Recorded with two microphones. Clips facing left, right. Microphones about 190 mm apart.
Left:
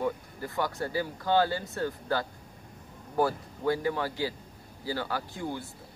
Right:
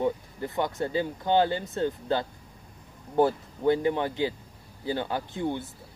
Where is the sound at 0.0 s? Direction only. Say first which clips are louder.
Right 4 dB; 20° right (ahead or behind).